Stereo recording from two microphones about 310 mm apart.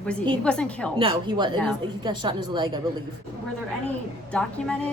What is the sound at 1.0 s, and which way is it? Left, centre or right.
A woman's voice, centre.